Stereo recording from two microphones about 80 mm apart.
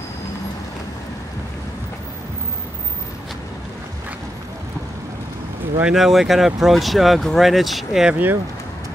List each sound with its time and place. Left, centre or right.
5.9 s speech: centre
8.1 s speech: right